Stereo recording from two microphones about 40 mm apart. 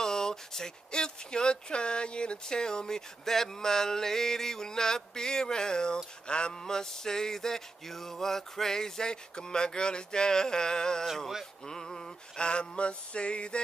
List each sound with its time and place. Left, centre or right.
0.0 s speech: centre
6.2 s male singing: left
6.6 s speech: centre
11.6 s male singing: centre